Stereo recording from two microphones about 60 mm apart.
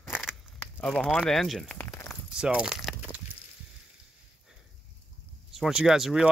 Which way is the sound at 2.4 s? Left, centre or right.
Centre.